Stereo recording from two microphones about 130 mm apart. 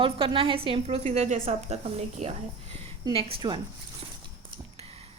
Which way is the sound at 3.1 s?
45° right (ahead or behind).